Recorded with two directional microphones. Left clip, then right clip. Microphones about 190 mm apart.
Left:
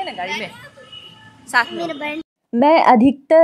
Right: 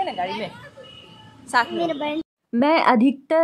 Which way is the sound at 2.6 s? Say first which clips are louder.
Left 6 dB; 15° left (ahead or behind).